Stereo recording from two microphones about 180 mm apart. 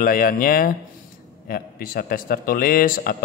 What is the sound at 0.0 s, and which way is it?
A man's voice, 50° left (ahead or behind).